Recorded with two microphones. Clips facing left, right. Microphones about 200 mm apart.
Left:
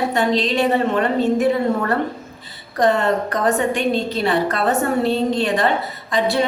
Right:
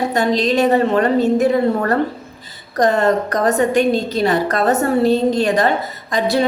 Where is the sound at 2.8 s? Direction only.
40° right (ahead or behind).